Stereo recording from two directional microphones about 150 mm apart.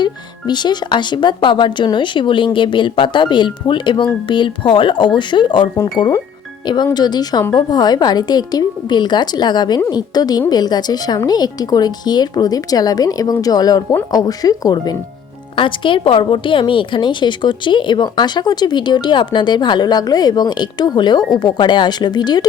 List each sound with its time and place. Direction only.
0.0 s speech: 30° left (ahead or behind)